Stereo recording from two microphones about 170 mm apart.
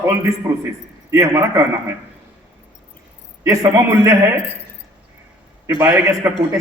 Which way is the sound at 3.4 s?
20° right (ahead or behind).